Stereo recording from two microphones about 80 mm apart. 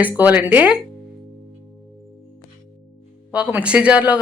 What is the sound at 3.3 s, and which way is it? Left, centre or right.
Speech, centre.